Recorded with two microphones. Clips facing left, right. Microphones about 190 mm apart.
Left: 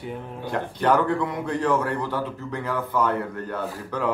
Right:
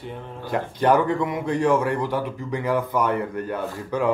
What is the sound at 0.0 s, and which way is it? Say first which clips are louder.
Speech: left 1 dB; 5° left (ahead or behind).